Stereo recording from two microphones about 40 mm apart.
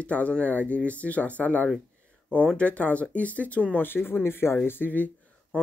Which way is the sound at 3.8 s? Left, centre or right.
Left.